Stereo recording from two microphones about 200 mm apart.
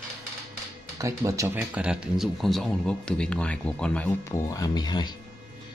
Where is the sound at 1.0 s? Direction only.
15° right (ahead or behind).